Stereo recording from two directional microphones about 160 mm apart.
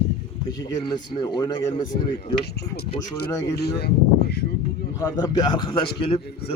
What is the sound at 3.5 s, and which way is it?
Speech, 90° left.